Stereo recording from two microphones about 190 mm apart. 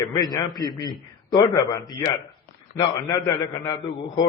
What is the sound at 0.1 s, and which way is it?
A man's voice, 20° left (ahead or behind).